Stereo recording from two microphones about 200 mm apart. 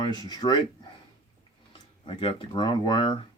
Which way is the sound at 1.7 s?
25° left (ahead or behind).